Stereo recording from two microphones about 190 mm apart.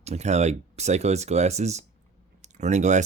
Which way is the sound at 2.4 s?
40° right (ahead or behind).